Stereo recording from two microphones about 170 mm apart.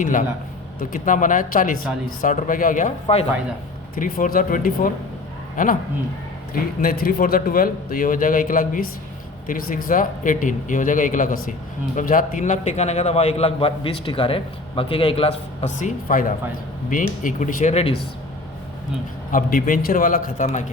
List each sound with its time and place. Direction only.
0.0 s a man's voice: 50° left (ahead or behind)
3.9 s speech: 55° left (ahead or behind)
6.5 s a man's voice: 60° left (ahead or behind); by 17.8 s 45° left (ahead or behind)
19.3 s a man's voice: 55° left (ahead or behind)